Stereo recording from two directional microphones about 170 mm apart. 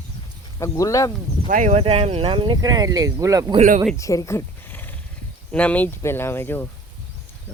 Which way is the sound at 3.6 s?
40° right (ahead or behind).